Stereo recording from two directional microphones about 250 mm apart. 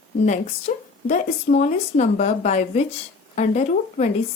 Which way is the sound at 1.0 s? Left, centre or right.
Left.